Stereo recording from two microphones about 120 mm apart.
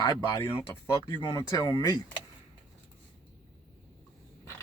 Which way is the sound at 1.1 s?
35° left (ahead or behind).